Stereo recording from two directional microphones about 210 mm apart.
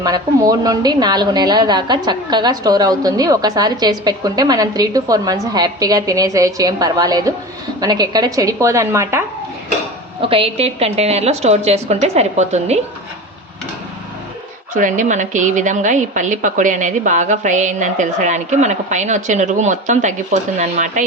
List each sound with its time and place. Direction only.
0.0 s a woman's voice: 15° right (ahead or behind)
10.2 s a woman's voice: 25° right (ahead or behind)
14.7 s a woman's voice: 40° right (ahead or behind)